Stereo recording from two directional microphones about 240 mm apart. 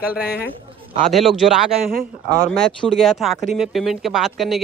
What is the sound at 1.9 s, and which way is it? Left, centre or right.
Speech, right.